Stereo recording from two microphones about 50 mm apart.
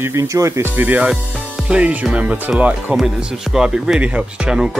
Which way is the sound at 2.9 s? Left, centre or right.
Centre.